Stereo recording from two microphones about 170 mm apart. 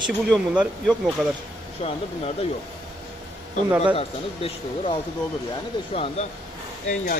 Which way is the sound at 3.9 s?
35° left (ahead or behind).